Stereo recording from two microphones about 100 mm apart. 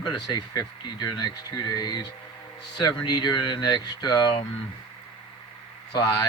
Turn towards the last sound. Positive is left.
turn(degrees=35)  # may be behind; listen again after turning